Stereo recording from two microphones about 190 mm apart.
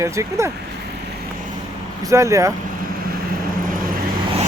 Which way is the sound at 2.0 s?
15° right (ahead or behind).